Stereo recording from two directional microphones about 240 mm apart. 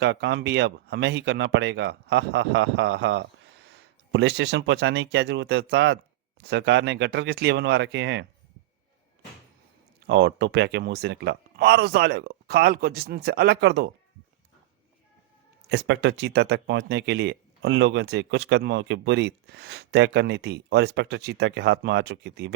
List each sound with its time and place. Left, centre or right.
0.0 s speech: right
10.1 s speech: right
15.7 s speech: right